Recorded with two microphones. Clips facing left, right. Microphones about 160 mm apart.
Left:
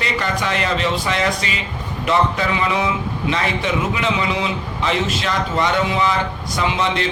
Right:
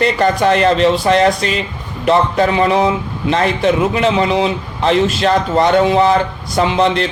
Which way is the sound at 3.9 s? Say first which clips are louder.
Right 7 dB; 40° right (ahead or behind).